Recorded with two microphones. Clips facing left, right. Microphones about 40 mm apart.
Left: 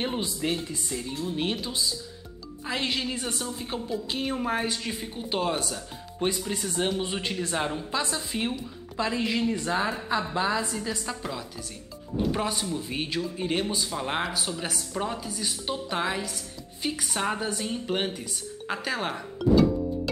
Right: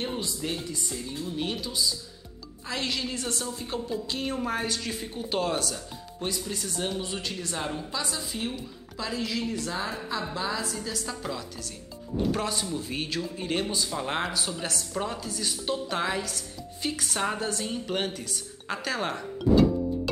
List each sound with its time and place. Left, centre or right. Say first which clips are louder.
0.0 s a woman's voice: left 3 dB; left
6.1 s a woman's voice: left 4 dB; left